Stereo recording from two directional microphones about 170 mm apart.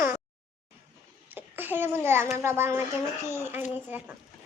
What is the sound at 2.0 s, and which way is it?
A child's voice, 15° right (ahead or behind).